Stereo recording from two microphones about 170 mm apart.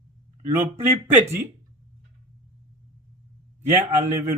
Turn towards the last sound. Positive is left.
turn(degrees=-15)  # may be behind; listen again after turning